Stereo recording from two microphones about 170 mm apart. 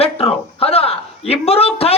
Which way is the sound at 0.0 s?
35° left (ahead or behind).